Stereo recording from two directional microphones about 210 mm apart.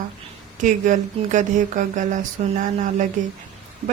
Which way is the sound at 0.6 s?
35° right (ahead or behind).